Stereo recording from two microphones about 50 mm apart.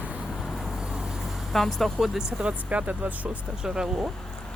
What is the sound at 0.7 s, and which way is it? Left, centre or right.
Vehicle, centre.